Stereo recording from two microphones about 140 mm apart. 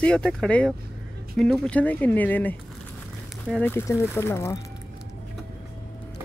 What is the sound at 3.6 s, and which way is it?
Speech, 20° left (ahead or behind).